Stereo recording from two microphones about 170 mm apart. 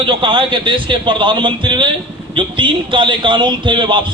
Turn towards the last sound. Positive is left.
turn(degrees=-30)  # may be behind; listen again after turning